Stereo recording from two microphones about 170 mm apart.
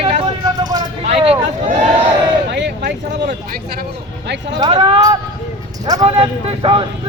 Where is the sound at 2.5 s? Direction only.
90° right.